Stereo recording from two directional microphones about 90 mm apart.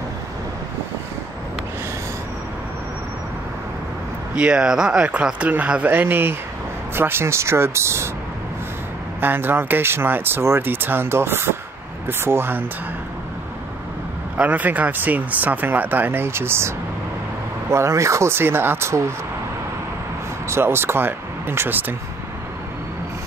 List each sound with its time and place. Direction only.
4.4 s speech: 10° right (ahead or behind); by 8.1 s 30° right (ahead or behind)
9.2 s speech: 25° right (ahead or behind)
14.3 s speech: 15° right (ahead or behind)
20.4 s speech: 30° right (ahead or behind)